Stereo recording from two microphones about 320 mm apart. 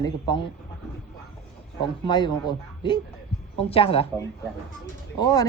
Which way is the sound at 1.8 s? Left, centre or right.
Centre.